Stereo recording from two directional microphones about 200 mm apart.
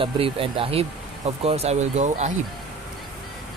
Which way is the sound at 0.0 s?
25° right (ahead or behind).